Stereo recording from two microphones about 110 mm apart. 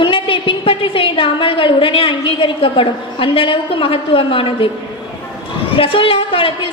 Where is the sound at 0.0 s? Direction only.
50° left (ahead or behind).